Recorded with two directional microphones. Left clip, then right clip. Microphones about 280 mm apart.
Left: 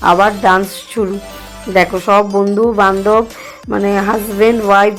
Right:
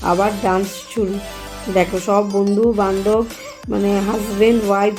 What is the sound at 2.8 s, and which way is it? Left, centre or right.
Speech, centre.